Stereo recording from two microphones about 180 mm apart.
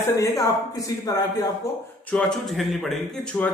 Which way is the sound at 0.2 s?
20° left (ahead or behind).